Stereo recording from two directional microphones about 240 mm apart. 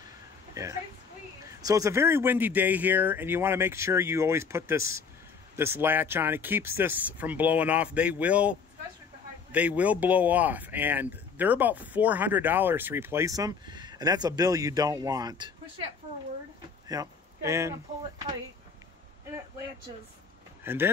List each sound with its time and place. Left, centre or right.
0.6 s speech: centre
16.8 s a sound: centre
20.6 s speech: centre